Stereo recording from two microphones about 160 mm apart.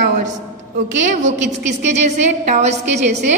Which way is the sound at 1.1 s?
50° right (ahead or behind).